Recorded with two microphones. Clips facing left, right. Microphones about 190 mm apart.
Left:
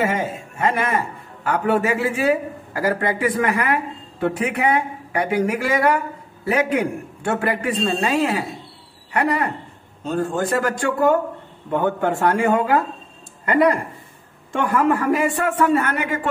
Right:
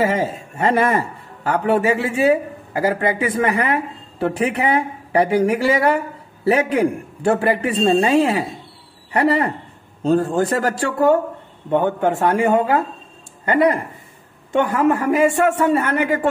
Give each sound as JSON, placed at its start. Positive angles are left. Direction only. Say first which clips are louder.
{"t": 0.2, "sound": "a man's voice", "louder": "right 2 dB", "side_deg": -35}
{"t": 11.7, "sound": "a man's voice", "louder": "right 3 dB", "side_deg": -20}